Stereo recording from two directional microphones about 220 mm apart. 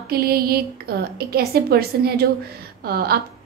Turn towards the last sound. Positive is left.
turn(degrees=-45)  # may be behind; listen again after turning